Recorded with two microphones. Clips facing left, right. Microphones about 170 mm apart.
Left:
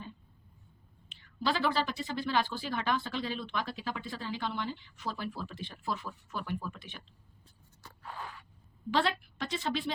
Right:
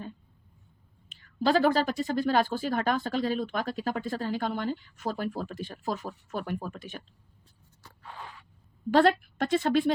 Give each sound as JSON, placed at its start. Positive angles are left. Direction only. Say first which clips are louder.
{"t": 1.5, "sound": "speech", "louder": "right 7 dB", "side_deg": -45}
{"t": 8.9, "sound": "speech", "louder": "right 9 dB", "side_deg": -50}